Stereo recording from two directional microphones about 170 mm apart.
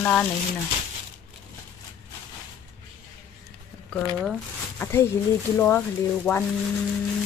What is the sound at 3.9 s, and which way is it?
Speech, 5° left (ahead or behind).